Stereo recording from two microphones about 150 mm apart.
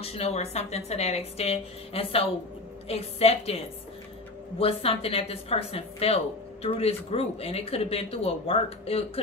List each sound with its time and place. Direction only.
0.0 s a woman's voice: 40° left (ahead or behind)